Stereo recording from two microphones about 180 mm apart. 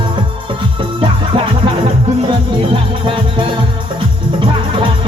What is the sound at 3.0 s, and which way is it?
Music, 30° right (ahead or behind).